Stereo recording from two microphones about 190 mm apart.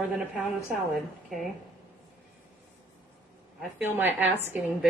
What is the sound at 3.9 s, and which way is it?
Speech, 10° right (ahead or behind).